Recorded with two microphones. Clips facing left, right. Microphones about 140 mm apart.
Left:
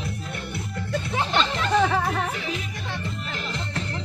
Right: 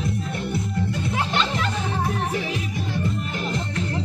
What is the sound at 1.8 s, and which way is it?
Music, 75° left (ahead or behind).